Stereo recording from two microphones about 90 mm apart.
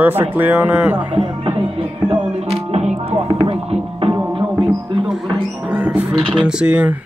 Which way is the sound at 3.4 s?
90° right.